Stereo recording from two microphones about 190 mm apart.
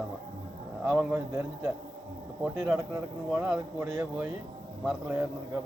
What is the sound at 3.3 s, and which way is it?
Speech, 5° right (ahead or behind).